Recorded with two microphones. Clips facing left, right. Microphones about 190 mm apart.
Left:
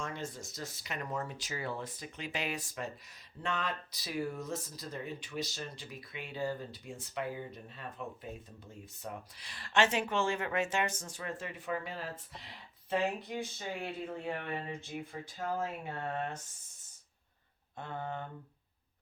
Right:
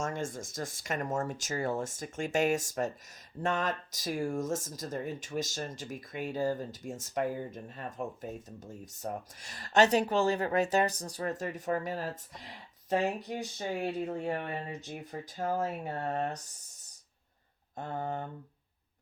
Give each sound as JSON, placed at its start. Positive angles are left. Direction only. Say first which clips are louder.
{"t": 0.0, "sound": "speech", "louder": "right 5 dB", "side_deg": -45}
{"t": 17.7, "sound": "speech", "louder": "right 4 dB", "side_deg": -40}